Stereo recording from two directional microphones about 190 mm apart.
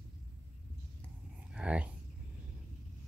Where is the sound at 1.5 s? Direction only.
5° right (ahead or behind).